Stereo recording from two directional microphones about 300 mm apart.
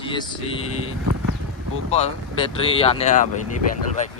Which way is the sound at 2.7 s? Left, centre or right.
Centre.